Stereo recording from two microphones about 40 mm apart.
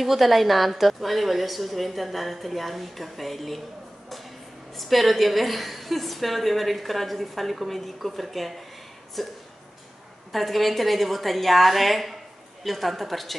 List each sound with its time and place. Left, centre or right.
0.0 s a woman's voice: centre
4.7 s a woman's voice: centre